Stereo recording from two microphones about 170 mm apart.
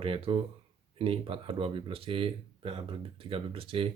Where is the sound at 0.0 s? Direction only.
35° right (ahead or behind).